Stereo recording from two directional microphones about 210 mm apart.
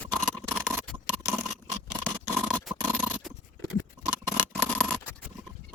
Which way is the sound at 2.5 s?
Centre (ahead or behind).